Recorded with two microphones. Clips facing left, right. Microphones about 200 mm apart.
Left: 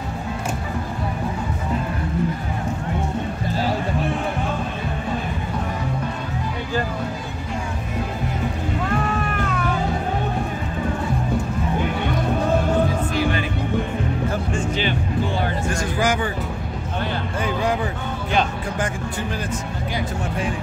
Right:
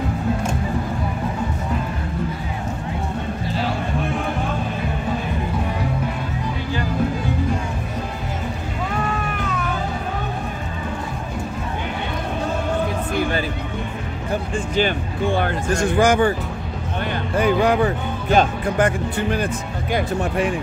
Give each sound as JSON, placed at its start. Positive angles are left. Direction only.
{"t": 14.8, "sound": "music", "side_deg": -50}
{"t": 17.4, "sound": "a sound", "side_deg": -65}
{"t": 18.3, "sound": "music", "side_deg": -45}